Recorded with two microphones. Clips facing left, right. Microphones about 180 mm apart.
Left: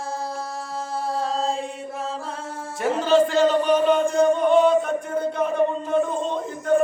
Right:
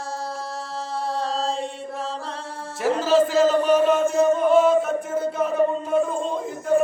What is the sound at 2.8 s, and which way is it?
Speech, centre (ahead or behind).